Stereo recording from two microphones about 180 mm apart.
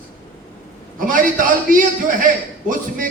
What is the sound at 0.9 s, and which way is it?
Speech, 50° right (ahead or behind).